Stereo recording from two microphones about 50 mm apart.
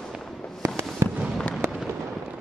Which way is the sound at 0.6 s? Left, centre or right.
Right.